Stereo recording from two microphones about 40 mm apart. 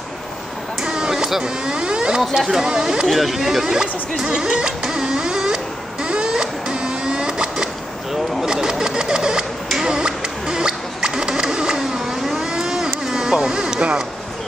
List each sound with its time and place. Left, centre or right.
0.8 s speech: centre
3.1 s speech: centre
4.2 s music: centre
6.0 s printer: right
9.8 s a sound: centre